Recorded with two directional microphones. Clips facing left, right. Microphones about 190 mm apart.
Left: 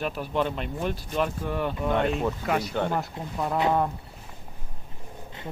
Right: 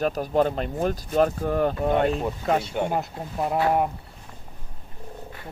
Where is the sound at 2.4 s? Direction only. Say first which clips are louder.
Right 3 dB; 30° right (ahead or behind).